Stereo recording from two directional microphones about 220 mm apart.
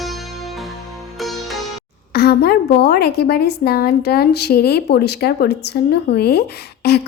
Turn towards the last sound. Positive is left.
turn(degrees=45)  # may be behind; listen again after turning